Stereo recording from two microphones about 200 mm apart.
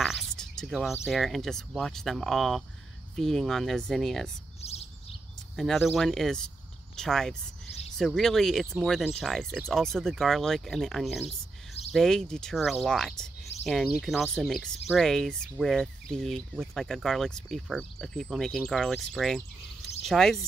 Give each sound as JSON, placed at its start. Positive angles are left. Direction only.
{"t": 0.0, "sound": "a sound", "side_deg": 0}
{"t": 1.0, "sound": "speech", "side_deg": 0}
{"t": 4.6, "sound": "bird", "side_deg": 30}
{"t": 5.6, "sound": "speech", "side_deg": 0}